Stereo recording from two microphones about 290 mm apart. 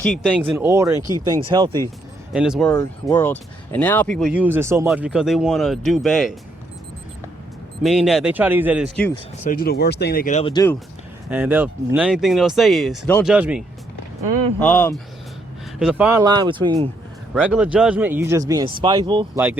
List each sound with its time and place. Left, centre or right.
0.0 s speech: centre
2.3 s speech: centre
7.8 s speech: centre
9.4 s speech: left; by 10.8 s centre
11.3 s speech: centre
14.6 s speech: centre
15.8 s speech: centre
17.3 s speech: centre